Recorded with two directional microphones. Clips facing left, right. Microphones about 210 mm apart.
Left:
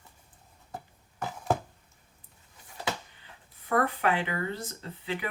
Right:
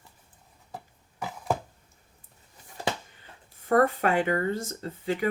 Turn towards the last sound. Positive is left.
turn(degrees=-45)  # may be behind; listen again after turning